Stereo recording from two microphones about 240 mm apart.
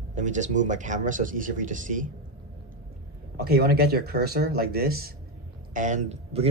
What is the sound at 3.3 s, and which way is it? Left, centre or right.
Speech, right.